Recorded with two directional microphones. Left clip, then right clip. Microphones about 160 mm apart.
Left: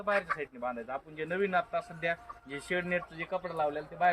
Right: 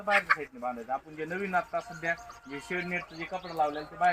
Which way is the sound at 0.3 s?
15° left (ahead or behind).